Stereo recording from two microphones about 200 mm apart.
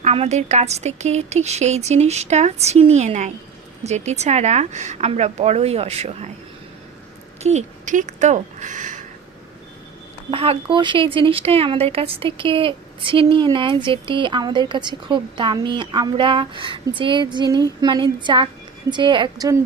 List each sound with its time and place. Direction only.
0.0 s speech: 35° right (ahead or behind)
7.4 s speech: 35° right (ahead or behind)
10.3 s speech: 25° right (ahead or behind)